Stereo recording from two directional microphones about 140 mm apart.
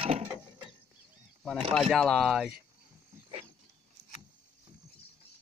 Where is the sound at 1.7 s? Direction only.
5° left (ahead or behind).